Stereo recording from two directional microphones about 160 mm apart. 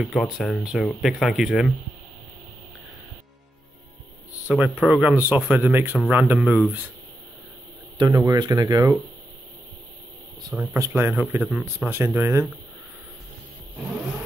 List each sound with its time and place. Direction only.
0.0 s speech: centre (ahead or behind)
4.6 s speech: centre (ahead or behind)
8.0 s speech: 20° right (ahead or behind)
10.5 s speech: 10° right (ahead or behind)